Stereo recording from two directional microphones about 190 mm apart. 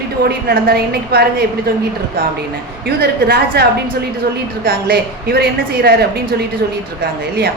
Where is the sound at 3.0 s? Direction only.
55° right (ahead or behind).